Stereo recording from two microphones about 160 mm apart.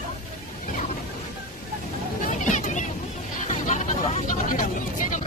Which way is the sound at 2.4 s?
50° left (ahead or behind).